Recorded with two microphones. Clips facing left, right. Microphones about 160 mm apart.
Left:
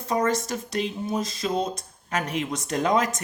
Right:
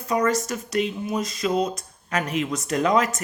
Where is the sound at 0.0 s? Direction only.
30° left (ahead or behind).